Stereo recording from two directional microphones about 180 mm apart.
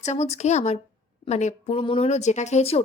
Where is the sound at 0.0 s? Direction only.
35° left (ahead or behind).